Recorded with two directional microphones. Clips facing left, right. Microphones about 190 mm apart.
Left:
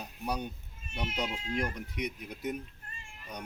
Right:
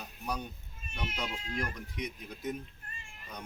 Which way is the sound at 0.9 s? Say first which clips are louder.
Left 3 dB; 20° left (ahead or behind).